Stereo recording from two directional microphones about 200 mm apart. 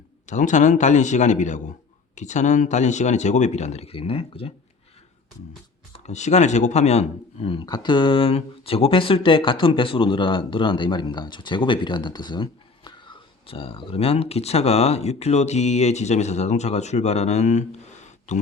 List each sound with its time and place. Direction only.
0.3 s speech: 35° left (ahead or behind)
5.9 s speech: 35° left (ahead or behind)